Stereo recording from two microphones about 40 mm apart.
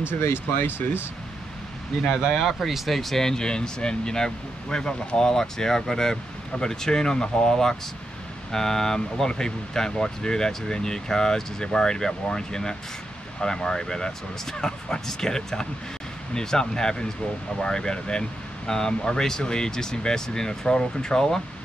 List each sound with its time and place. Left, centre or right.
0.2 s speech: left
2.0 s speech: centre